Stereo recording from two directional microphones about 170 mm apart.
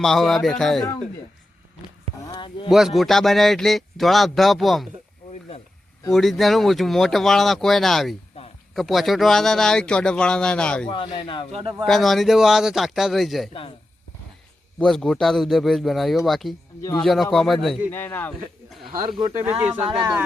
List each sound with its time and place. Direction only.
0.0 s a man's voice: centre (ahead or behind)
2.2 s a sound: 25° left (ahead or behind)
2.6 s a man's voice: centre (ahead or behind)
6.1 s a man's voice: centre (ahead or behind)
10.8 s speech: 30° left (ahead or behind)
11.5 s speech: 25° right (ahead or behind)
11.9 s a man's voice: centre (ahead or behind)
13.5 s speech: 35° left (ahead or behind)
14.8 s a man's voice: 5° left (ahead or behind)
17.9 s speech: 10° left (ahead or behind)
19.4 s speech: 10° right (ahead or behind)